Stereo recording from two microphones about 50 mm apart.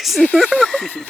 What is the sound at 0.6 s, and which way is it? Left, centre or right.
Howl, centre.